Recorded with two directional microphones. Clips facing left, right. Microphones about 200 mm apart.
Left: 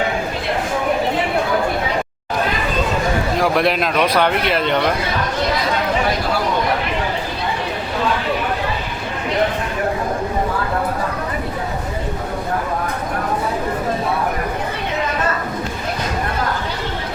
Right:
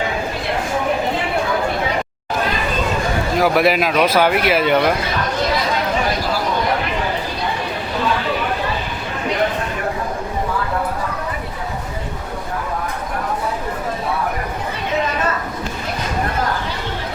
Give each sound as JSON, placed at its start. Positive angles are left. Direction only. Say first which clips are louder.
{"t": 3.3, "sound": "speech", "louder": "right 4 dB", "side_deg": -5}